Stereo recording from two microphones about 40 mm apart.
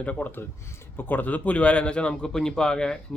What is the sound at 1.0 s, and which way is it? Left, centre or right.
Speech, left.